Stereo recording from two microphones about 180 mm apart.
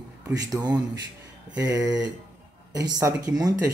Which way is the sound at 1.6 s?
20° right (ahead or behind).